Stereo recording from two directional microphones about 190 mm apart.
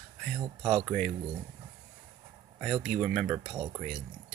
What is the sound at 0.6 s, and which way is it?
Speech, centre (ahead or behind).